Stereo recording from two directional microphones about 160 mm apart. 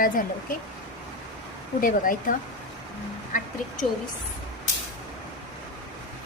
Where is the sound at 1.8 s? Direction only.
60° left (ahead or behind).